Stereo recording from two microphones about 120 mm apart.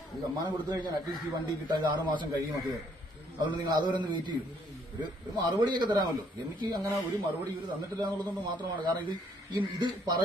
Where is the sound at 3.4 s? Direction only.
35° right (ahead or behind).